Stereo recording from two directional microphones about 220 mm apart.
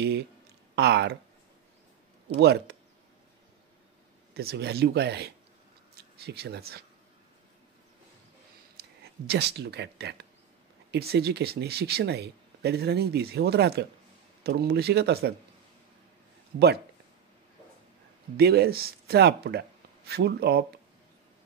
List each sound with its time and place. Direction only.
0.7 s speech: 50° right (ahead or behind)
2.3 s speech: 50° right (ahead or behind)
4.3 s speech: 45° right (ahead or behind)
9.0 s speech: 45° right (ahead or behind)
16.5 s speech: 50° right (ahead or behind)
18.3 s speech: 45° right (ahead or behind)